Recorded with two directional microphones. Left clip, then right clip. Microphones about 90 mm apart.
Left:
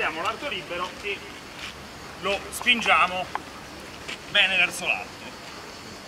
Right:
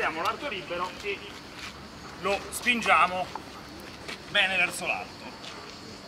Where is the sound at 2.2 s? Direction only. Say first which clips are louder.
Left 4 dB; centre (ahead or behind).